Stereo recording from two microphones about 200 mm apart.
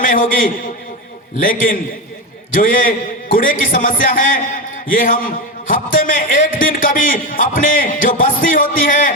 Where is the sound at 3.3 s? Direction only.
45° left (ahead or behind).